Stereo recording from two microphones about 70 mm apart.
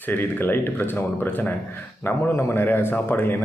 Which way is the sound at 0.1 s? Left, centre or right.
Left.